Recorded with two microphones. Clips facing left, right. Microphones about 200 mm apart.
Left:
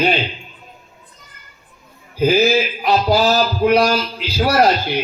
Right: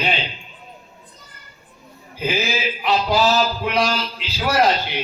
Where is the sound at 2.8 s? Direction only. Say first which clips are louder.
Left 1 dB; 40° left (ahead or behind).